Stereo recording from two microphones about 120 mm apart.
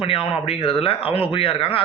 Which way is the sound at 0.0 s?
50° left (ahead or behind).